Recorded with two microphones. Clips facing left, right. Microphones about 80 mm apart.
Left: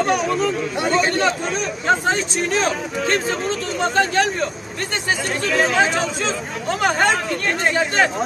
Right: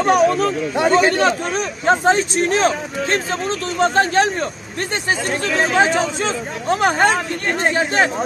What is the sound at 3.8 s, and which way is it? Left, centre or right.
Speech, right.